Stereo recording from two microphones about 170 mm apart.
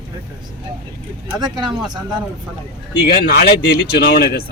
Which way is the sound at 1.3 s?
25° right (ahead or behind).